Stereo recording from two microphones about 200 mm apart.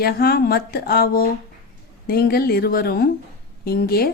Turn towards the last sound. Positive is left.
turn(degrees=50)  # may be behind; listen again after turning